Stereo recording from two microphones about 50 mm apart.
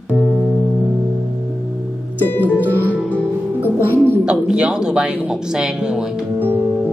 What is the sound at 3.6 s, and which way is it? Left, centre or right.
Speech, right.